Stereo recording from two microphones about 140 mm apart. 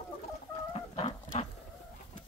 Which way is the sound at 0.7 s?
45° left (ahead or behind).